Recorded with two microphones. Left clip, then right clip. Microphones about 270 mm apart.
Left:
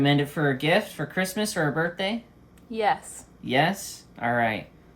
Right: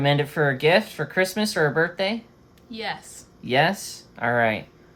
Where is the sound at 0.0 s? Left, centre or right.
Right.